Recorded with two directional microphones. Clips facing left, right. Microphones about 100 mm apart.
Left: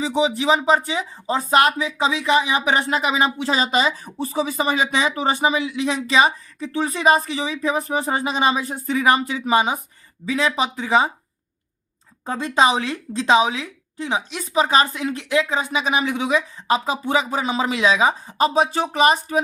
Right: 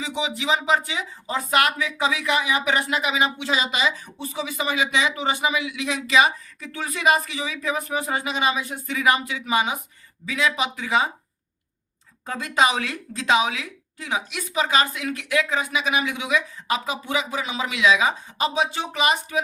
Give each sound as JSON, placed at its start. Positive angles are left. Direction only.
{"t": 0.0, "sound": "speech", "side_deg": 35}
{"t": 12.2, "sound": "speech", "side_deg": 30}